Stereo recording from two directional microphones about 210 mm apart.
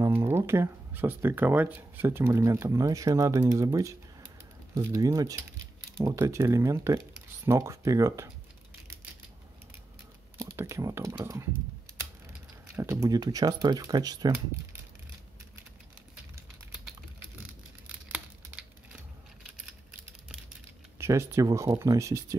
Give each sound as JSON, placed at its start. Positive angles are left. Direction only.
{"t": 0.0, "sound": "speech", "side_deg": -10}
{"t": 10.4, "sound": "speech", "side_deg": -15}
{"t": 12.7, "sound": "speech", "side_deg": -15}
{"t": 17.4, "sound": "scissors", "side_deg": -5}
{"t": 21.0, "sound": "speech", "side_deg": -15}